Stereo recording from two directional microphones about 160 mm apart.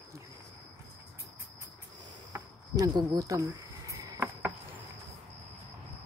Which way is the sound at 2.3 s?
20° right (ahead or behind).